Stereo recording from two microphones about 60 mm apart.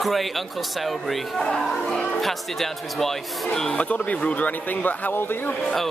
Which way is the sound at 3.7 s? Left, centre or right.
Centre.